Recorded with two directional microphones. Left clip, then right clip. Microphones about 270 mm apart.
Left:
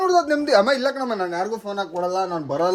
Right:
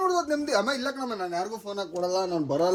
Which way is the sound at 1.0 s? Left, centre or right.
Left.